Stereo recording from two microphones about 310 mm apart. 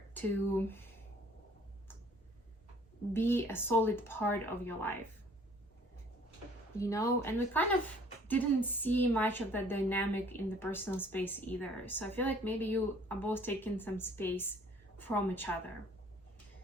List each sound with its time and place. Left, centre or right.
0.1 s a woman's voice: centre
3.1 s a woman's voice: centre
6.7 s a woman's voice: centre